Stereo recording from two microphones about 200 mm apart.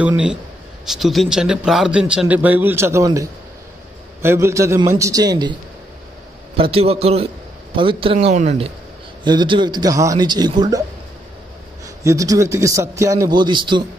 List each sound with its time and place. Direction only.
0.8 s a man's voice: centre (ahead or behind); by 10.8 s 20° right (ahead or behind)
11.8 s a man's voice: 15° right (ahead or behind)